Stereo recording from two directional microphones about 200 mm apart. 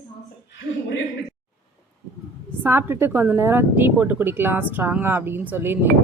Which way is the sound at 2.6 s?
10° right (ahead or behind).